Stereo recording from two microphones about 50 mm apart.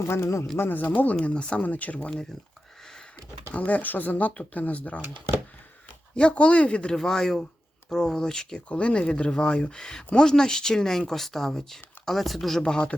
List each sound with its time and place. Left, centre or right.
0.1 s speech: left
0.6 s speech: left
1.2 s speech: left
3.2 s speech: left
6.1 s speech: left
7.0 s speech: centre
12.5 s speech: centre